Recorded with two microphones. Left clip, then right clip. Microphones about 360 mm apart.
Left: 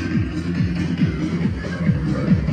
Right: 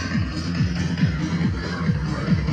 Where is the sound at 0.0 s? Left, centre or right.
Right.